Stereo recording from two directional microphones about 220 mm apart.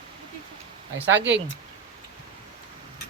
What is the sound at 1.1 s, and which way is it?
Speech, 55° right (ahead or behind).